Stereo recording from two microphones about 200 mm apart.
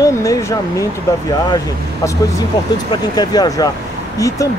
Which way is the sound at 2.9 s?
20° left (ahead or behind).